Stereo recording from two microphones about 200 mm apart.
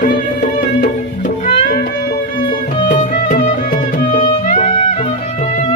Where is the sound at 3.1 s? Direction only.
40° left (ahead or behind).